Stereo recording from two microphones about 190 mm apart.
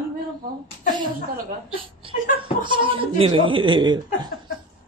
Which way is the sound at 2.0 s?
30° right (ahead or behind).